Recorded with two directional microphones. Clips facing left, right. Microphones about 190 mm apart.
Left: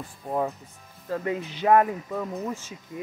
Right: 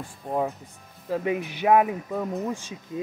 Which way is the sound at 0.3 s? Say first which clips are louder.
Right 1 dB; 5° right (ahead or behind).